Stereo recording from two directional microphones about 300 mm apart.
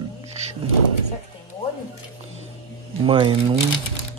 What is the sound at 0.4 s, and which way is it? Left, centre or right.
Music, right.